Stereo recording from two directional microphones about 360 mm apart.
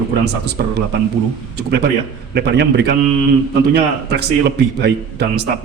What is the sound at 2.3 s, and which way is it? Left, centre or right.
A man's voice, right.